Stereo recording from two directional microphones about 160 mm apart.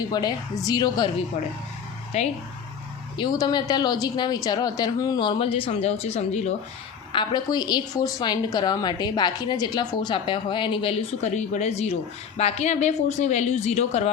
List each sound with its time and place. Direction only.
0.1 s a woman's voice: 25° left (ahead or behind)
2.1 s speech: 45° left (ahead or behind)
3.2 s a woman's voice: 25° left (ahead or behind); by 6.5 s 45° left (ahead or behind)
7.1 s a woman's voice: 30° left (ahead or behind)
11.2 s speech: 50° left (ahead or behind)